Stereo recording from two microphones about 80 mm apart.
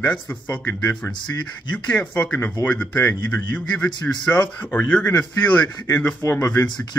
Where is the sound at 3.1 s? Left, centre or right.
Left.